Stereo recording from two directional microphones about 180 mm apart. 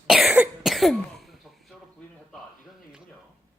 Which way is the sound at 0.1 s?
Centre (ahead or behind).